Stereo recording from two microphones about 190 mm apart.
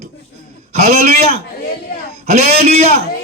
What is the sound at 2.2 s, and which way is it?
Speech, 35° right (ahead or behind).